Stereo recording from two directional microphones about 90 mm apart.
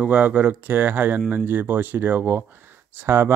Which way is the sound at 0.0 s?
15° right (ahead or behind).